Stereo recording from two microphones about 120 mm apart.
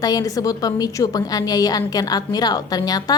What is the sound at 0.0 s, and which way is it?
A woman's voice, 30° left (ahead or behind).